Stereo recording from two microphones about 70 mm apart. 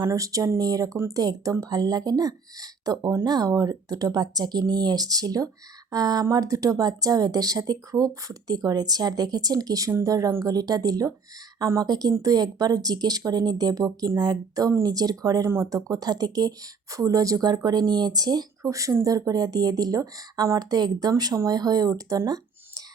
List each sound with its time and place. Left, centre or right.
0.1 s speech: right
6.3 s speech: right
14.2 s speech: right
14.8 s speech: right
15.4 s speech: right
15.7 s speech: right
18.6 s speech: right